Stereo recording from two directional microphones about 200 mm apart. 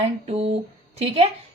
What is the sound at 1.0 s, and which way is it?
Speech, 30° right (ahead or behind).